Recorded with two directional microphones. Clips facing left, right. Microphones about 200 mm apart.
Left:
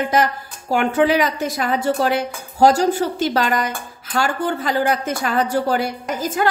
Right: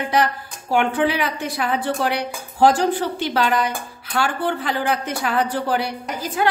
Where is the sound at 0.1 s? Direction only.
40° left (ahead or behind).